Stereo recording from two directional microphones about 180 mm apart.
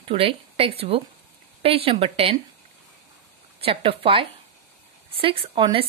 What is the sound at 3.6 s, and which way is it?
A woman's voice, 30° right (ahead or behind).